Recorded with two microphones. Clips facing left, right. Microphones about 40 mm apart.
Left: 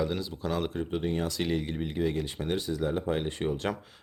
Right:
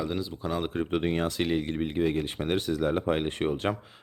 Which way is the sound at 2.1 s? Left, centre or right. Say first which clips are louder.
Right 3 dB; right.